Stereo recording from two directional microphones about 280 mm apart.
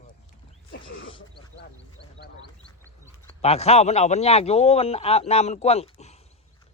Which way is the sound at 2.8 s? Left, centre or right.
Centre.